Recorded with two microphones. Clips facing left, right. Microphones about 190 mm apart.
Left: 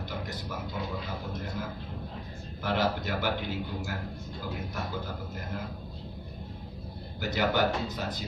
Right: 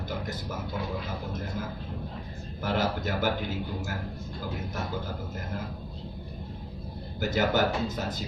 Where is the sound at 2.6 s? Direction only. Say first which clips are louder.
Right 1 dB; 45° right (ahead or behind).